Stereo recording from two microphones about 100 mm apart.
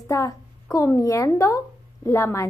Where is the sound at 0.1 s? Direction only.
35° left (ahead or behind).